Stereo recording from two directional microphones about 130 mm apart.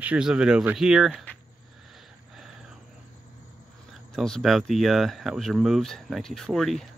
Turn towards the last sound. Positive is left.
turn(degrees=5)  # may be behind; listen again after turning